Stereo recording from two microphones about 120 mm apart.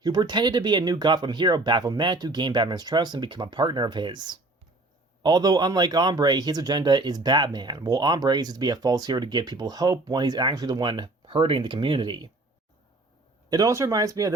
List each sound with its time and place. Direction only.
0.0 s speech: 35° right (ahead or behind)
13.5 s speech: 30° right (ahead or behind)